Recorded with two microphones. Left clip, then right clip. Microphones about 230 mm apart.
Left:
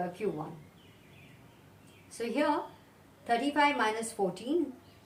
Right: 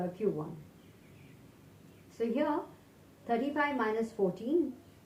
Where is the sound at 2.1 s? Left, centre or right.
Left.